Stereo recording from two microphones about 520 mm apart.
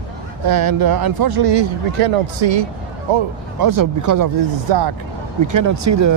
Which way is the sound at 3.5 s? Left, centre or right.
Right.